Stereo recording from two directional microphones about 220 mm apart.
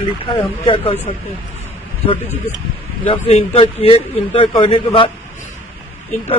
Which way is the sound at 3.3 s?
25° left (ahead or behind).